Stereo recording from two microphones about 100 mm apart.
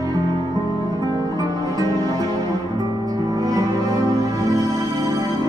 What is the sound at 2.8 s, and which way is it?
Music, 40° right (ahead or behind).